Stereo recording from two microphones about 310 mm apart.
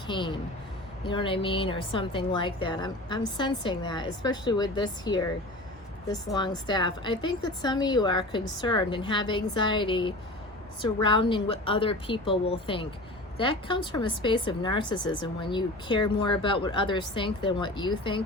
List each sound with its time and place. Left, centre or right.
0.1 s speech: centre